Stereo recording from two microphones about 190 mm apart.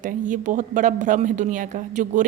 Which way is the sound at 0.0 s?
40° right (ahead or behind).